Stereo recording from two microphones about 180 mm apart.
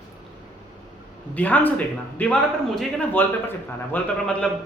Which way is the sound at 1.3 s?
10° left (ahead or behind).